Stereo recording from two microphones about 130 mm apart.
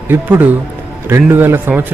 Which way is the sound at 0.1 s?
15° right (ahead or behind).